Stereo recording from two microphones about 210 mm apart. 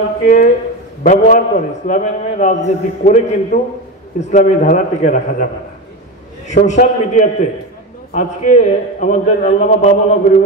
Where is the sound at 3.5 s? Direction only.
50° left (ahead or behind).